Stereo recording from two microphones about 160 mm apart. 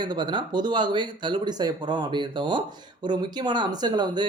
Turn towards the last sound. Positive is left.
turn(degrees=-25)  # may be behind; listen again after turning